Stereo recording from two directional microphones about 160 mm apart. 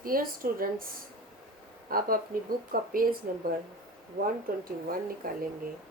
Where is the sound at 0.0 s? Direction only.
65° right (ahead or behind).